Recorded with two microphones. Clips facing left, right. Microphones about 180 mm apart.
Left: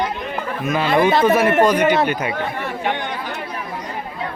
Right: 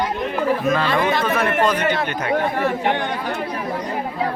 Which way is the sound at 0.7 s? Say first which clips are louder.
Left 3 dB; 10° left (ahead or behind).